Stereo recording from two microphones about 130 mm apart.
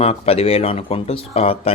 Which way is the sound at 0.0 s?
50° left (ahead or behind).